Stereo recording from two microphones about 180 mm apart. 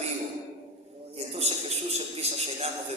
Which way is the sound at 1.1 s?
35° right (ahead or behind).